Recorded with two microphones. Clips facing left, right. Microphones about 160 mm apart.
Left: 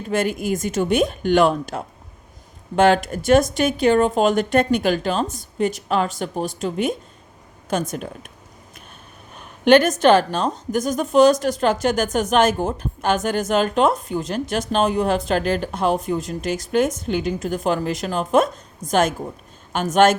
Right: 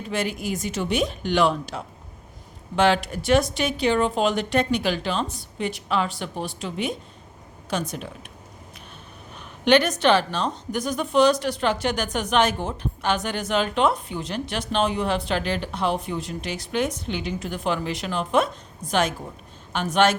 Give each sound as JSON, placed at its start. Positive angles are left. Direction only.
{"t": 0.1, "sound": "a woman's voice", "side_deg": 50}
{"t": 9.6, "sound": "a woman's voice", "side_deg": 45}